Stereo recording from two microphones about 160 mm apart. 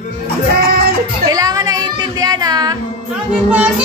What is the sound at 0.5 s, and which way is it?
Music, 75° right (ahead or behind).